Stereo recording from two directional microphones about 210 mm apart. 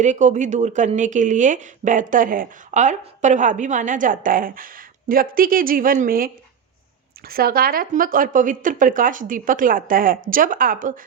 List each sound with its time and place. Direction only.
0.0 s speech: 35° right (ahead or behind)